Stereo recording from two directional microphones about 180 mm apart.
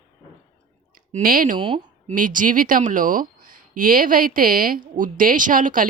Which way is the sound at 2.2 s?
50° right (ahead or behind).